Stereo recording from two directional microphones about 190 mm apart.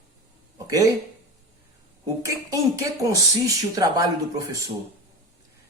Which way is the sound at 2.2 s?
15° right (ahead or behind).